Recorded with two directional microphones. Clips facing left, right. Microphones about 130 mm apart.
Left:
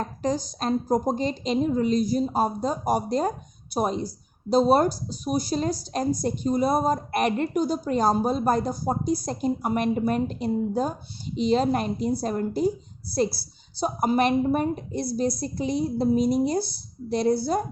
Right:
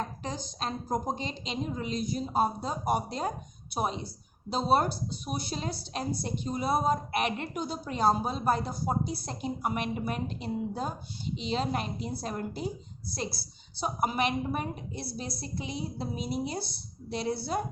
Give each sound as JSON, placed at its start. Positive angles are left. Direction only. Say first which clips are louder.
{"t": 0.0, "sound": "a woman's voice", "louder": "left 9 dB", "side_deg": 40}